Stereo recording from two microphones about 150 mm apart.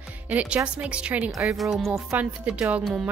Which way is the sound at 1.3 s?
20° right (ahead or behind).